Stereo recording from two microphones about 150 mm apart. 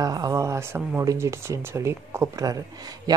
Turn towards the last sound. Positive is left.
turn(degrees=-25)  # may be behind; listen again after turning